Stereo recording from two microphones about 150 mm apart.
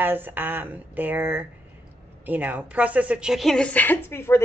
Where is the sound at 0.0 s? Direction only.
15° right (ahead or behind).